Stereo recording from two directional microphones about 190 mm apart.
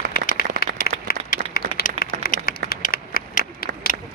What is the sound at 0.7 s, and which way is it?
Applause, 50° left (ahead or behind).